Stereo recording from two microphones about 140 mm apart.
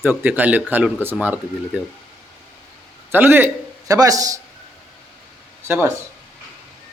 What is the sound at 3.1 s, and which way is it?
A man's voice, 15° right (ahead or behind).